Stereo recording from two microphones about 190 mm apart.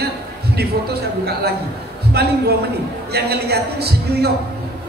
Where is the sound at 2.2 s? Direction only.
55° right (ahead or behind).